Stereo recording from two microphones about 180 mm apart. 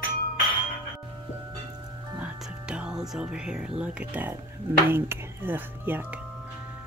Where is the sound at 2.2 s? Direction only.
5° right (ahead or behind).